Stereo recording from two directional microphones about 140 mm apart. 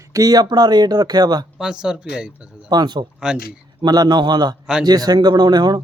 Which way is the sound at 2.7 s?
30° right (ahead or behind).